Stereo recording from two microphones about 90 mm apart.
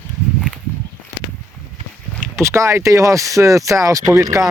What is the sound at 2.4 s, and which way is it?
Speech, 35° right (ahead or behind).